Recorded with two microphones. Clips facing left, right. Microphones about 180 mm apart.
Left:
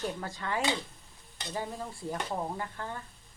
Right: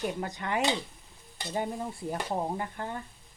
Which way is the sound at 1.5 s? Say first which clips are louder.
Right 4 dB; 25° right (ahead or behind).